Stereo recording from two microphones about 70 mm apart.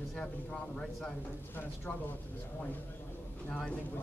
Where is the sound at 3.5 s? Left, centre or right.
Centre.